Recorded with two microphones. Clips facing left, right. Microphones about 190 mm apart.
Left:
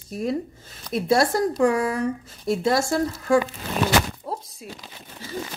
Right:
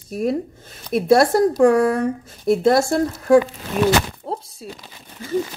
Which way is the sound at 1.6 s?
50° right (ahead or behind).